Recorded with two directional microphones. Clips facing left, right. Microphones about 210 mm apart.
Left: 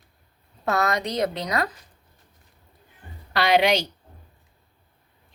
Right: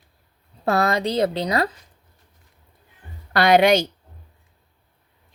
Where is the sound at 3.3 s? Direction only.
50° right (ahead or behind).